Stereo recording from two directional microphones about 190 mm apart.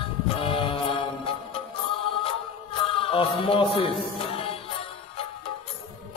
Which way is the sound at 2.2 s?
30° left (ahead or behind).